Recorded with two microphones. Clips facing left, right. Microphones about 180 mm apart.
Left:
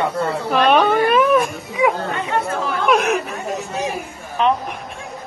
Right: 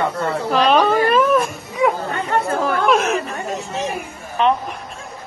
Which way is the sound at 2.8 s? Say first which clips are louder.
Left 3 dB; centre (ahead or behind).